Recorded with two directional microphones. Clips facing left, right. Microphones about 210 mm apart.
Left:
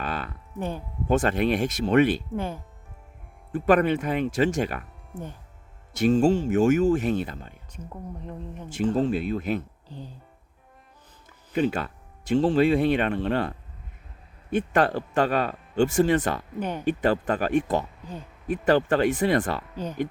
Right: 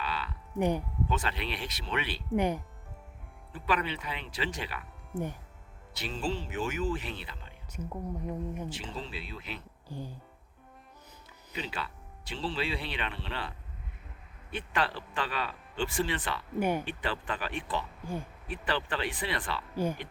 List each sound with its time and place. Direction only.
0.0 s music: 50° left (ahead or behind)
1.0 s speech: 45° left (ahead or behind)
2.3 s speech: 15° right (ahead or behind)
3.5 s speech: 50° left (ahead or behind)
5.9 s speech: 45° left (ahead or behind)
8.2 s speech: 10° right (ahead or behind)
8.7 s speech: 45° left (ahead or behind)
11.5 s speech: 45° left (ahead or behind)
14.5 s speech: 45° left (ahead or behind)
16.6 s speech: 10° right (ahead or behind)
16.8 s speech: 45° left (ahead or behind)
18.0 s speech: 10° right (ahead or behind)
18.4 s speech: 45° left (ahead or behind)
19.7 s speech: 10° right (ahead or behind)